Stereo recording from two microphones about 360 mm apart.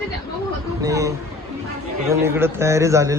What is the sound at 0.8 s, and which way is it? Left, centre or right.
Speech, centre.